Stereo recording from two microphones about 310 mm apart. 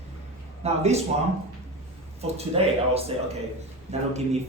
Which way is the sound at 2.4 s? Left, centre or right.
Centre.